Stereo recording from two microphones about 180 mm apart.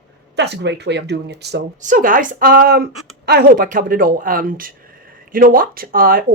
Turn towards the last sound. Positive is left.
turn(degrees=-50)  # may be behind; listen again after turning